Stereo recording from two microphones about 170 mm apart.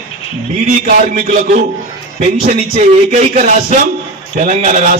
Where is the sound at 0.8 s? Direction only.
55° right (ahead or behind).